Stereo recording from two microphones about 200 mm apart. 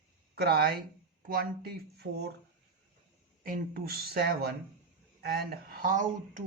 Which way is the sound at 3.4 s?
45° right (ahead or behind).